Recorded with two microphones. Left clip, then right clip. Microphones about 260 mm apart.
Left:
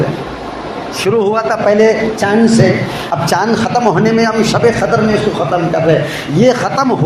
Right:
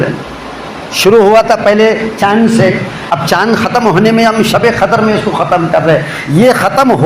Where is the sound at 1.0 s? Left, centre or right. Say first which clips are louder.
Right 8 dB; right.